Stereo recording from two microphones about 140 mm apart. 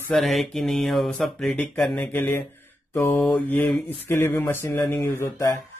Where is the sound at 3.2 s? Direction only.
10° left (ahead or behind).